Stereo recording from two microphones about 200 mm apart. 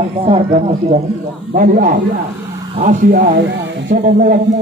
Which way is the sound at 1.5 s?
40° right (ahead or behind).